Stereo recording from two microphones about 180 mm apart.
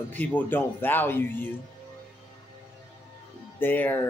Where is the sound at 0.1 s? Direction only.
10° left (ahead or behind).